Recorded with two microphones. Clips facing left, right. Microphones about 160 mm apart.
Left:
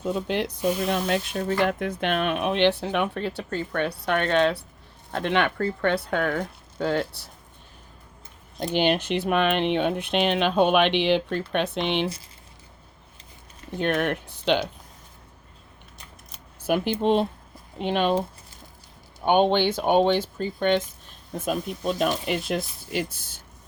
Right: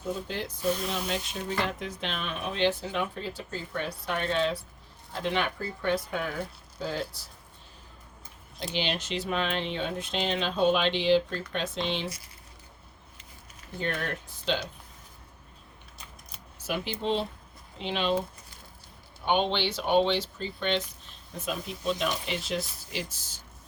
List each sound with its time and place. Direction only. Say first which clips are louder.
0.0 s speech: left 7 dB; 70° left (ahead or behind)
8.7 s speech: left 9 dB; 55° left (ahead or behind)
13.7 s speech: left 8 dB; 70° left (ahead or behind)
16.6 s speech: left 8 dB; 55° left (ahead or behind)
19.2 s speech: left 7 dB; 50° left (ahead or behind)